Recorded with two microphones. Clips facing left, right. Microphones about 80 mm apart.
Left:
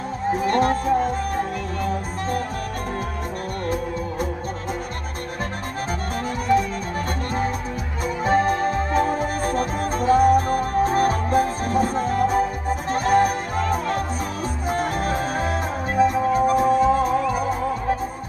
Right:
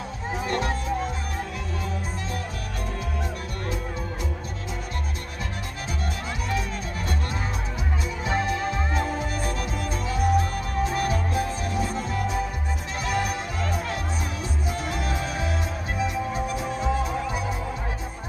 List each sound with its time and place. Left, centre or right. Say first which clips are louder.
0.3 s music: left 8 dB; left
8.2 s music: left 8 dB; left